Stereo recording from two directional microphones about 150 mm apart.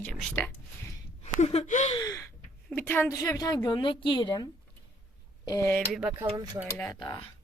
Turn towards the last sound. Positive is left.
turn(degrees=25)  # may be behind; listen again after turning